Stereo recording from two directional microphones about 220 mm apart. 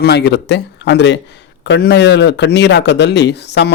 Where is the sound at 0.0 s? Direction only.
50° left (ahead or behind).